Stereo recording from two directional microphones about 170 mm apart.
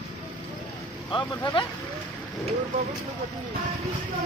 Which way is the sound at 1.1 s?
30° left (ahead or behind).